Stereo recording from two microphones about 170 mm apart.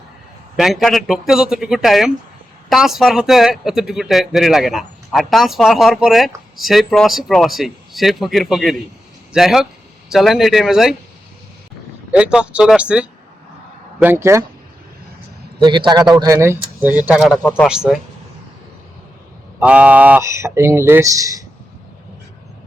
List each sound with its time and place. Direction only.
0.5 s speech: centre (ahead or behind)
12.1 s speech: 5° right (ahead or behind)
15.5 s a man's voice: 30° right (ahead or behind); by 18.0 s 5° right (ahead or behind)
19.5 s speech: 5° right (ahead or behind)